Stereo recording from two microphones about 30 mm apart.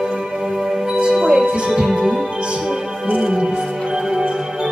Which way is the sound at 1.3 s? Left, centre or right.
Right.